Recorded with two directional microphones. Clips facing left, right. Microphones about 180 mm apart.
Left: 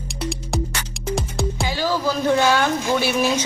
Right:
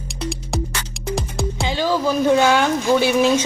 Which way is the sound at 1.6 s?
20° right (ahead or behind).